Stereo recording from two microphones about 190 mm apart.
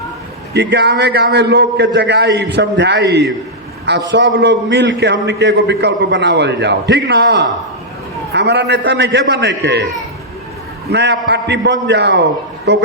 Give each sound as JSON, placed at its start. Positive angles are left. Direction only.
{"t": 0.5, "sound": "a man's voice", "side_deg": -65}
{"t": 10.8, "sound": "a man's voice", "side_deg": -60}